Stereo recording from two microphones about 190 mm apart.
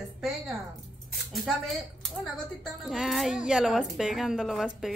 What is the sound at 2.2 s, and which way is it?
A woman's voice, centre (ahead or behind).